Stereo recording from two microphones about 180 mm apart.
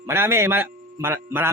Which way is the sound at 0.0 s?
15° right (ahead or behind).